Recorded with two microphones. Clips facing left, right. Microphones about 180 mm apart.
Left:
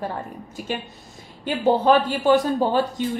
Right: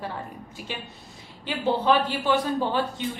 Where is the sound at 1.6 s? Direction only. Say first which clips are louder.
Left 5 dB; 45° left (ahead or behind).